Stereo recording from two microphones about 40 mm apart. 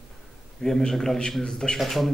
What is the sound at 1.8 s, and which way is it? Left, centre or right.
Speech, centre.